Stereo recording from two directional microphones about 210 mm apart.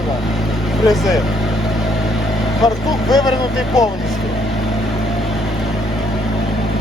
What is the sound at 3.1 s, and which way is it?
Speech, 20° left (ahead or behind).